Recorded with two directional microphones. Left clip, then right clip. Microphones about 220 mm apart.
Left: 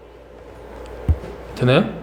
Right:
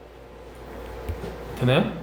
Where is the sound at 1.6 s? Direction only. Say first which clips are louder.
Left 5 dB; 40° left (ahead or behind).